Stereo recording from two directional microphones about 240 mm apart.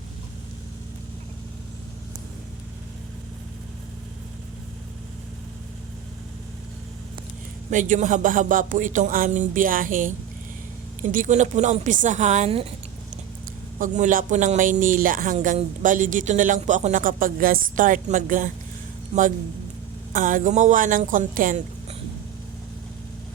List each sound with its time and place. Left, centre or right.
7.7 s speech: right
11.1 s a woman's voice: right
13.7 s speech: right